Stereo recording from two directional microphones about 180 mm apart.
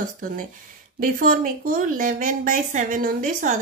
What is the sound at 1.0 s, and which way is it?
A woman's voice, 50° right (ahead or behind).